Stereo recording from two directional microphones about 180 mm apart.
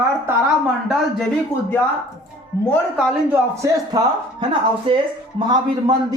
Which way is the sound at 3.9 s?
25° right (ahead or behind).